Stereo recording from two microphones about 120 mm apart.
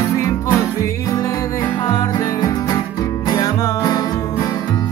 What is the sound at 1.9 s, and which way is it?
Music, 35° left (ahead or behind).